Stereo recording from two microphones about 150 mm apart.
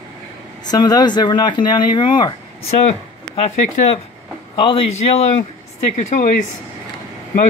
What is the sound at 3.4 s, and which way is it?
Speech, 45° left (ahead or behind).